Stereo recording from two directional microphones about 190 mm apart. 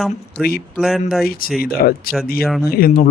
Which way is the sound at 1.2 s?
50° left (ahead or behind).